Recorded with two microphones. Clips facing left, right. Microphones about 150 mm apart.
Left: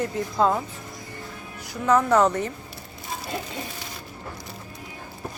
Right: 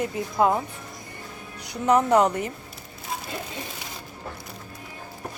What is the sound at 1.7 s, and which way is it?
Speech, 20° right (ahead or behind).